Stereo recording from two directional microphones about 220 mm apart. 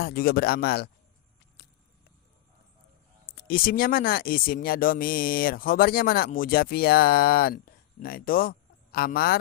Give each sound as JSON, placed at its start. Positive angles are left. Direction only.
{"t": 0.0, "sound": "speech", "side_deg": 45}
{"t": 3.3, "sound": "speech", "side_deg": 40}